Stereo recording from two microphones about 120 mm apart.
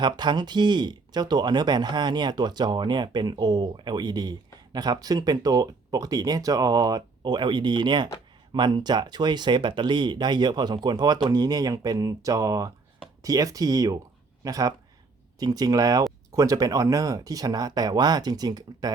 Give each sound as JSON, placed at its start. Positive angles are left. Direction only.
{"t": 0.0, "sound": "speech", "side_deg": -40}